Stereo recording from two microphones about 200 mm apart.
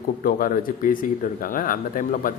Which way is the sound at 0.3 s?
45° left (ahead or behind).